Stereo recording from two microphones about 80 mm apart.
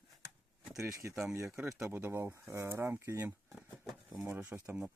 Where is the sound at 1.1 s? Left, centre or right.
Right.